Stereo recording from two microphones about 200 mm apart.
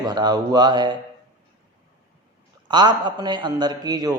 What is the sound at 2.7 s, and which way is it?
A man's voice, 20° right (ahead or behind).